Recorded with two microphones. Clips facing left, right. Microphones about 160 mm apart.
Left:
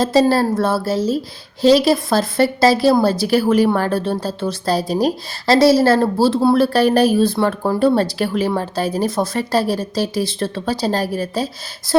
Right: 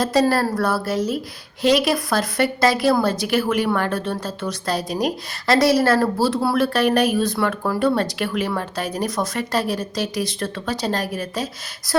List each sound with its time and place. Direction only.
0.0 s a woman's voice: 25° left (ahead or behind)